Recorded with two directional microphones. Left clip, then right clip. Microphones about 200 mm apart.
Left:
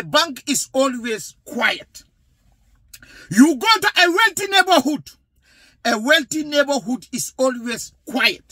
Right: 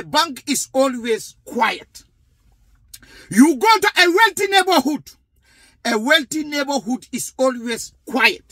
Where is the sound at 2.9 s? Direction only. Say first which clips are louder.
Right 1 dB; 15° left (ahead or behind).